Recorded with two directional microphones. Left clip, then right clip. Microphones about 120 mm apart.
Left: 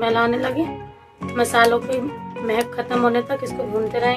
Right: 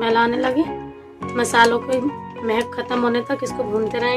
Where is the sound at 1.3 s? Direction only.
50° right (ahead or behind).